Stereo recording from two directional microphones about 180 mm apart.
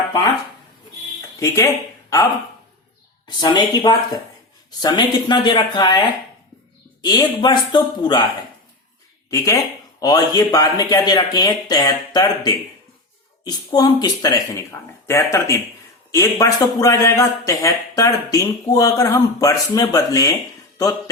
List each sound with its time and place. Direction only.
1.4 s speech: 15° left (ahead or behind)
3.2 s speech: 25° left (ahead or behind)
7.0 s speech: 25° left (ahead or behind)
9.3 s speech: 15° left (ahead or behind)